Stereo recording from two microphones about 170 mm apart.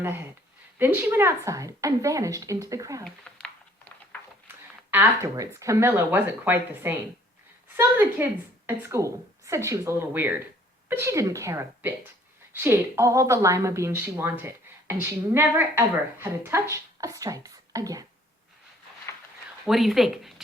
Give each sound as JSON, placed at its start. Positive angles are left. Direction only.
{"t": 0.0, "sound": "a woman's voice", "side_deg": -10}
{"t": 3.4, "sound": "a sound", "side_deg": 5}
{"t": 4.9, "sound": "a woman's voice", "side_deg": -15}
{"t": 19.6, "sound": "speech", "side_deg": 0}